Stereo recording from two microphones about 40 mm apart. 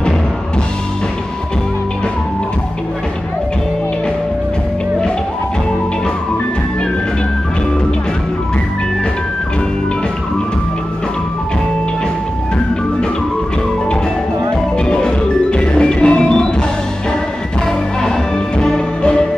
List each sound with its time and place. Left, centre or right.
14.9 s music: left